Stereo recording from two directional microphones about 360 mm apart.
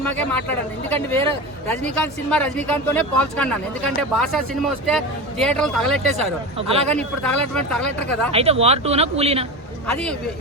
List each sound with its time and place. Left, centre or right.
0.0 s speech: centre
8.3 s speech: centre
9.8 s speech: centre